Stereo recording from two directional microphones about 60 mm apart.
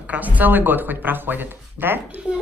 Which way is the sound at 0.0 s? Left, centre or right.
Right.